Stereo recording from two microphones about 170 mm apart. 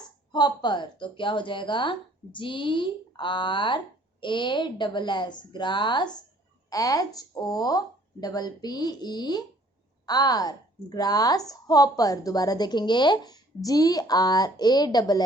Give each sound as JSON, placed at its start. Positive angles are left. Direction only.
{"t": 0.3, "sound": "a woman's voice", "side_deg": 25}